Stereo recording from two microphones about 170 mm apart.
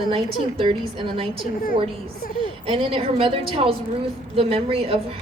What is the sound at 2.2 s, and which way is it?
Speech, 55° left (ahead or behind).